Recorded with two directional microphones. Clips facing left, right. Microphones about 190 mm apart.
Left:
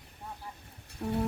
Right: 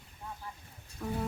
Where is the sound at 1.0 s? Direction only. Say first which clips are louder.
Left 3 dB; 35° left (ahead or behind).